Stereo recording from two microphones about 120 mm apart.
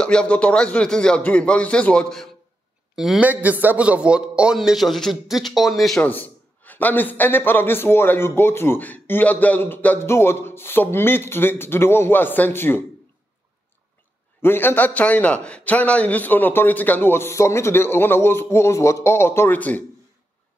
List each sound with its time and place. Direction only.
0.0 s a man's voice: 5° left (ahead or behind)
3.3 s a man's voice: 15° right (ahead or behind)
6.0 s a man's voice: 15° left (ahead or behind)
14.4 s a man's voice: 20° left (ahead or behind)